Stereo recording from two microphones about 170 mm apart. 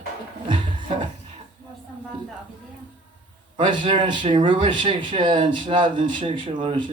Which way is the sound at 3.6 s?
30° right (ahead or behind).